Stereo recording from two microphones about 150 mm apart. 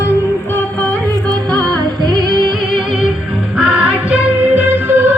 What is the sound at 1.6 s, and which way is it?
Music, 30° right (ahead or behind).